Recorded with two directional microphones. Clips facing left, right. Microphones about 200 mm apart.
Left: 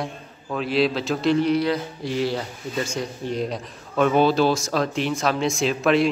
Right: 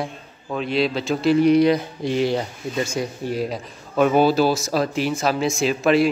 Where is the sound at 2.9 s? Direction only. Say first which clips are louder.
Right 2 dB; 5° right (ahead or behind).